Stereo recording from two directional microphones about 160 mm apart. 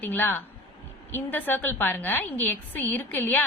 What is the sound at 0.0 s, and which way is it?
A woman's voice, 10° left (ahead or behind).